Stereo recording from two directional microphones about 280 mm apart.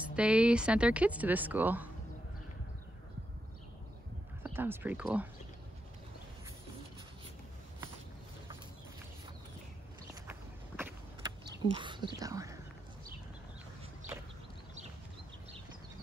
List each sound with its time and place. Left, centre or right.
0.1 s speech: centre
4.6 s speech: centre
10.8 s vehicle: centre
11.7 s speech: centre